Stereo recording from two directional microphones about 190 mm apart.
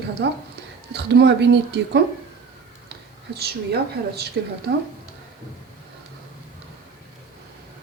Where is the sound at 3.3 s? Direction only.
55° right (ahead or behind).